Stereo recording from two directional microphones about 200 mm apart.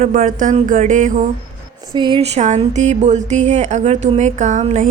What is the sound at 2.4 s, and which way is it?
A woman's voice, 35° right (ahead or behind).